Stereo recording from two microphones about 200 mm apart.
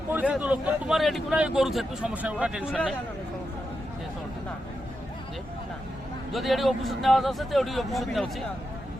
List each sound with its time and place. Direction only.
0.1 s speech: 10° right (ahead or behind)
6.3 s speech: centre (ahead or behind)